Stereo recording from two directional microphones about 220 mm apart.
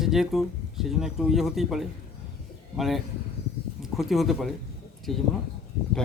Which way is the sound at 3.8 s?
Centre (ahead or behind).